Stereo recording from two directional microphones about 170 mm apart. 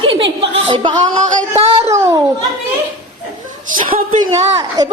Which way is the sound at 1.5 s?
35° right (ahead or behind).